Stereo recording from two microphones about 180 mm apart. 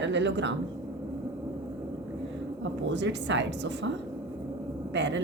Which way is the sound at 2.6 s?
80° right.